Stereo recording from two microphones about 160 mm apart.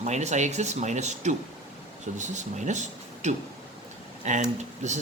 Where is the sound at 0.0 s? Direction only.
45° right (ahead or behind).